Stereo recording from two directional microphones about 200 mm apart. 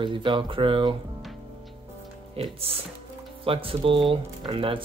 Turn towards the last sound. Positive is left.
turn(degrees=-25)  # may be behind; listen again after turning